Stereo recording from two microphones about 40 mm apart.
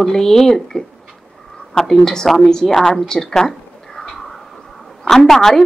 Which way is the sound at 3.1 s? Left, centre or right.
Centre.